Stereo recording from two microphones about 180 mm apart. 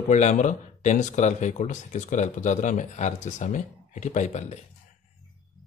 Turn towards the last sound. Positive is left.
turn(degrees=40)  # may be behind; listen again after turning